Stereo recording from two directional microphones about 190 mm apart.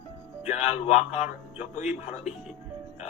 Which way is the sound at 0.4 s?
35° left (ahead or behind).